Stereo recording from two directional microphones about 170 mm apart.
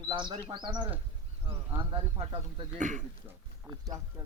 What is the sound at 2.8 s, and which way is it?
Speech, 45° right (ahead or behind).